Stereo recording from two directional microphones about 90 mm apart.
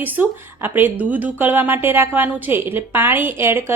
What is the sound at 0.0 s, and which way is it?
A woman's voice, 20° right (ahead or behind).